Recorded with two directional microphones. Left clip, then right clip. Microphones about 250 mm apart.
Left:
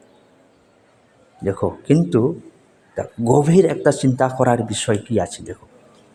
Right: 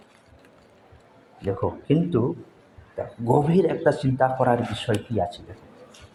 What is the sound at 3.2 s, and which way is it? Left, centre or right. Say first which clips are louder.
Speech: left 6 dB; left.